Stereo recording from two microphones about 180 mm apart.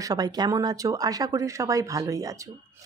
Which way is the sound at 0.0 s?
20° right (ahead or behind).